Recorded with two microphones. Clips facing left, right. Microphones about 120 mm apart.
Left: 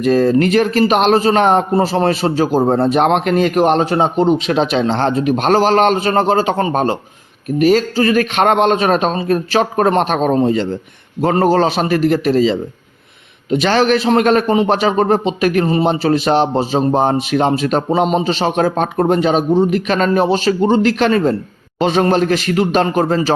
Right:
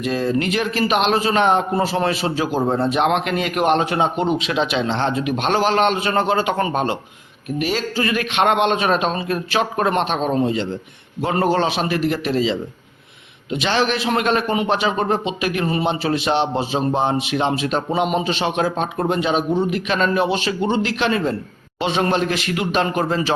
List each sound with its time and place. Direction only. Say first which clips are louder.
0.0 s a man's voice: left 8 dB; 45° left (ahead or behind)
15.6 s a man's voice: left 6 dB; 35° left (ahead or behind)